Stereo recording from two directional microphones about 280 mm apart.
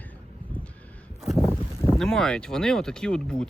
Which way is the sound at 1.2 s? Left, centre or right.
Centre.